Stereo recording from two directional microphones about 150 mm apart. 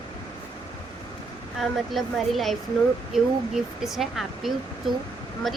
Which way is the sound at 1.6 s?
Centre (ahead or behind).